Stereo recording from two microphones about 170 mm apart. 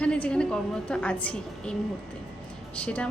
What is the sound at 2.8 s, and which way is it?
Speech, 5° left (ahead or behind).